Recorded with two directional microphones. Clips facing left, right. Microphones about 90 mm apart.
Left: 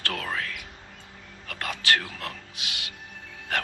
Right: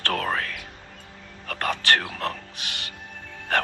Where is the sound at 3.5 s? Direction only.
50° right (ahead or behind).